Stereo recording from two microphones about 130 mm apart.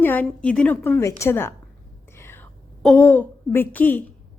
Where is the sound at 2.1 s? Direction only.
20° left (ahead or behind).